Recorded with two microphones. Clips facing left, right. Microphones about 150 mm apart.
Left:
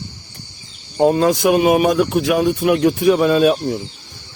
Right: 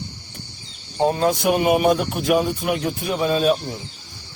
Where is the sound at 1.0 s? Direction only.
90° left; by 3.6 s 75° left (ahead or behind).